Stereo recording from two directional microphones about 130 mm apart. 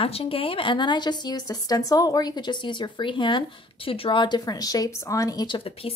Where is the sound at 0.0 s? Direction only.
45° left (ahead or behind).